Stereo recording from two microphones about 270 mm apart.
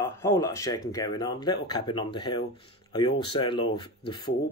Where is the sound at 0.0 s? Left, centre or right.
Centre.